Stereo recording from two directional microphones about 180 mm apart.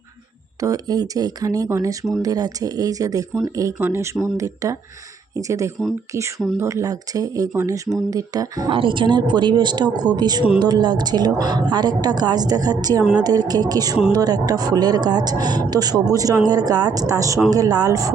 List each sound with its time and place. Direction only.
0.6 s a woman's voice: 20° right (ahead or behind)